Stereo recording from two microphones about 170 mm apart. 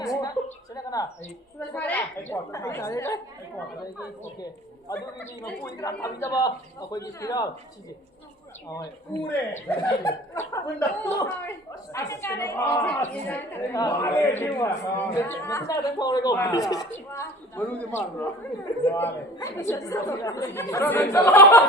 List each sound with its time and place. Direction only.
0.0 s a sound: 20° left (ahead or behind)
1.5 s speech: 10° left (ahead or behind)
4.9 s a man's voice: 20° left (ahead or behind)
9.6 s speech: 15° left (ahead or behind)